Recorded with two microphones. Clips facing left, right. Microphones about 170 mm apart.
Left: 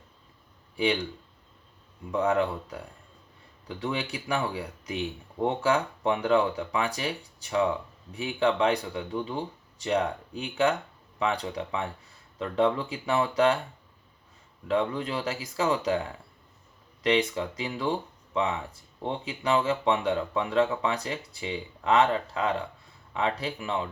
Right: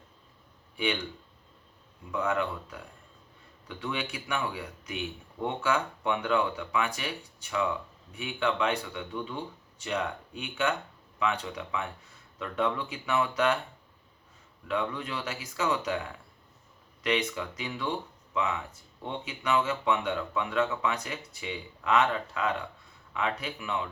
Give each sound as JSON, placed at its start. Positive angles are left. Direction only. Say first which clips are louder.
{"t": 2.1, "sound": "speech", "louder": "left 5 dB", "side_deg": 35}
{"t": 8.1, "sound": "speech", "louder": "left 4 dB", "side_deg": 35}
{"t": 14.7, "sound": "speech", "louder": "left 5 dB", "side_deg": 30}
{"t": 17.0, "sound": "speech", "louder": "left 4 dB", "side_deg": 30}